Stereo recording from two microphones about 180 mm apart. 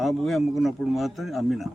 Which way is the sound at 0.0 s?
Centre (ahead or behind).